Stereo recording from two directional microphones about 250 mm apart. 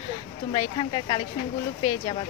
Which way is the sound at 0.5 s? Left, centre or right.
Centre.